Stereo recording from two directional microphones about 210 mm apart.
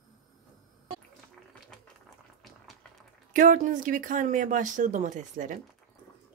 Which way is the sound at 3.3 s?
40° right (ahead or behind).